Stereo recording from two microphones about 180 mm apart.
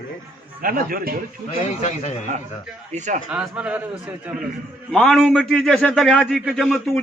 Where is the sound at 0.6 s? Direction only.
55° right (ahead or behind).